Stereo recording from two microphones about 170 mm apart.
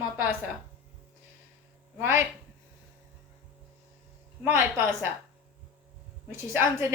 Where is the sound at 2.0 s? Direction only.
15° right (ahead or behind).